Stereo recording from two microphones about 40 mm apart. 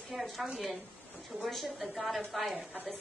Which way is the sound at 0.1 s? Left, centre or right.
Centre.